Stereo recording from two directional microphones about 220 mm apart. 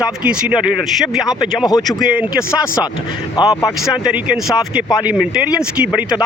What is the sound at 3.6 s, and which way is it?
Speech, 5° right (ahead or behind).